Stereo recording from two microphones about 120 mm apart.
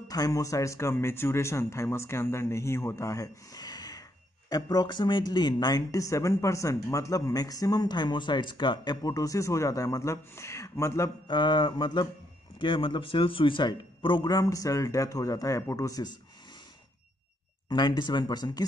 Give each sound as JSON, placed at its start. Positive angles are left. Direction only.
{"t": 0.1, "sound": "speech", "side_deg": 30}
{"t": 11.2, "sound": "a man's voice", "side_deg": 40}
{"t": 17.6, "sound": "a man's voice", "side_deg": 40}